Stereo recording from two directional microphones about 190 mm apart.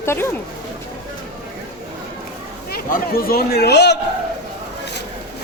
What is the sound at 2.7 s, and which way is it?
A man's voice, 50° left (ahead or behind).